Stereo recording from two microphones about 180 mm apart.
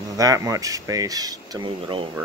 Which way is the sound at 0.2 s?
20° right (ahead or behind).